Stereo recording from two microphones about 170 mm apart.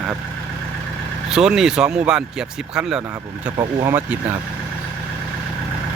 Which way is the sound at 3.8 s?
15° right (ahead or behind).